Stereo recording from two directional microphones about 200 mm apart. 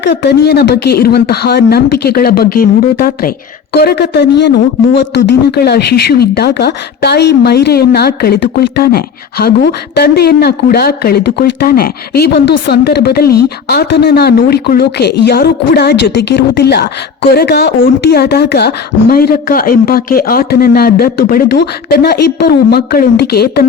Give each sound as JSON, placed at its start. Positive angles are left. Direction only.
{"t": 0.0, "sound": "speech", "side_deg": 60}